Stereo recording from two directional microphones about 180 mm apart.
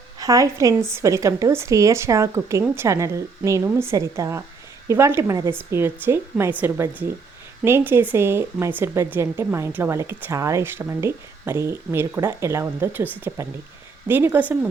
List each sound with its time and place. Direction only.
0.2 s speech: 20° right (ahead or behind)